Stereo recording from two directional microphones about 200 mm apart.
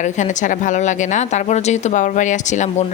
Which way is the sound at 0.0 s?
40° left (ahead or behind).